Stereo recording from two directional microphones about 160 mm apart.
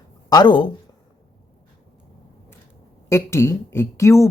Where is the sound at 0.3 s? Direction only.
25° left (ahead or behind).